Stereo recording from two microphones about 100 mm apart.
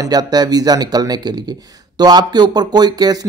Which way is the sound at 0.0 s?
40° right (ahead or behind).